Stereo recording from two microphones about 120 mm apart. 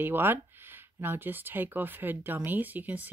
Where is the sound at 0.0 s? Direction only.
15° right (ahead or behind).